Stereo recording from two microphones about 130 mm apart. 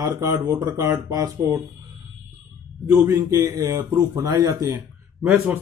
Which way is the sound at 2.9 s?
15° right (ahead or behind).